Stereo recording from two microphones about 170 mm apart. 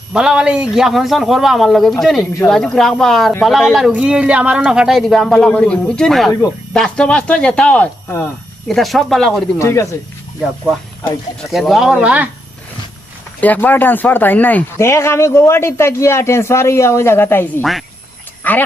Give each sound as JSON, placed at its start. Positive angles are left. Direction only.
{"t": 0.1, "sound": "a man's voice", "side_deg": -5}
{"t": 9.6, "sound": "speech", "side_deg": 15}
{"t": 11.5, "sound": "a man's voice", "side_deg": 0}
{"t": 13.4, "sound": "speech", "side_deg": 10}
{"t": 17.6, "sound": "a man's voice", "side_deg": 0}